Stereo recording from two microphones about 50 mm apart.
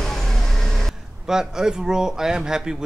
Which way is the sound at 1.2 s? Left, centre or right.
Centre.